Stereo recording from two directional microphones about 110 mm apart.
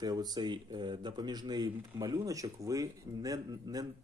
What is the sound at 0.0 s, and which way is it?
Speech, 35° right (ahead or behind).